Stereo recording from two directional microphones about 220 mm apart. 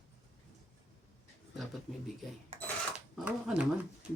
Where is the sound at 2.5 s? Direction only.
25° right (ahead or behind).